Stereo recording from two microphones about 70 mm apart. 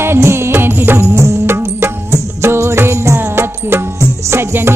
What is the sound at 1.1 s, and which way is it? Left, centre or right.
Music, right.